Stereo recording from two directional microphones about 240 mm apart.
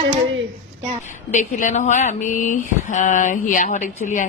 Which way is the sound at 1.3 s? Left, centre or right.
Left.